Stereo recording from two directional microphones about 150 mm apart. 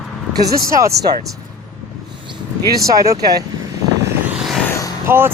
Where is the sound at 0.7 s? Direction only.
20° right (ahead or behind).